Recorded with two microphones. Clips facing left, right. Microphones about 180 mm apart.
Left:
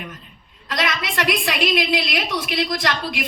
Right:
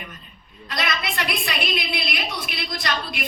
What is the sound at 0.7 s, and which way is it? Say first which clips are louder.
A woman's voice: left 3 dB; 90° left.